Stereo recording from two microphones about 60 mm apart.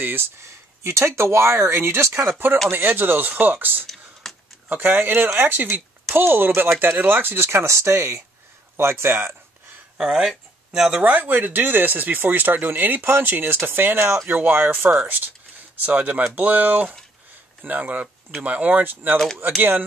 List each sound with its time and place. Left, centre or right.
0.0 s speech: right
0.8 s speech: right
3.8 s a sound: centre
4.6 s speech: right
9.9 s speech: centre
11.0 s speech: right
14.2 s speech: right
15.7 s speech: right